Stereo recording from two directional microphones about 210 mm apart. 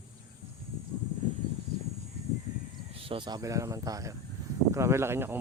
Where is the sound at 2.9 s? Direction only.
25° right (ahead or behind).